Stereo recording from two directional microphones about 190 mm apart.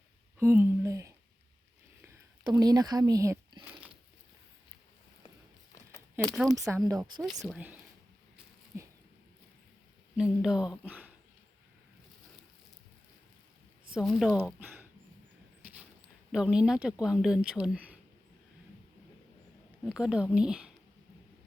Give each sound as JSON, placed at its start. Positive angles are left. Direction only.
{"t": 0.3, "sound": "a sound", "side_deg": -10}
{"t": 6.2, "sound": "speech", "side_deg": 0}
{"t": 6.8, "sound": "speech", "side_deg": -15}
{"t": 7.3, "sound": "speech", "side_deg": 0}
{"t": 8.7, "sound": "a sound", "side_deg": -15}
{"t": 10.2, "sound": "speech", "side_deg": -5}
{"t": 13.9, "sound": "speech", "side_deg": 0}
{"t": 16.3, "sound": "speech", "side_deg": -5}
{"t": 19.8, "sound": "speech", "side_deg": -5}